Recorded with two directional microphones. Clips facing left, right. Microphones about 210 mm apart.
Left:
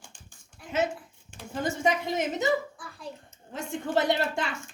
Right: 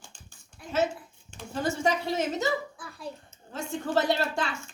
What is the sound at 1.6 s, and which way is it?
Speech, 15° left (ahead or behind).